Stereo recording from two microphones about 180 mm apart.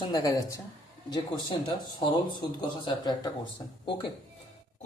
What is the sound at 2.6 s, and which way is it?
Speech, 25° left (ahead or behind).